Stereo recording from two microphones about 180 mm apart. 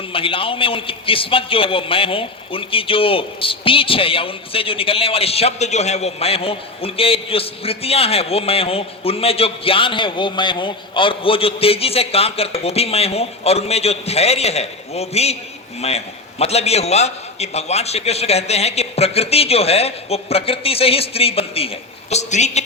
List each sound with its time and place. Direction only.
0.1 s a man's voice: 30° left (ahead or behind)